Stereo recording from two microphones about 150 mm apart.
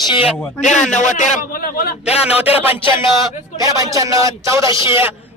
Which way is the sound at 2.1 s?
40° left (ahead or behind).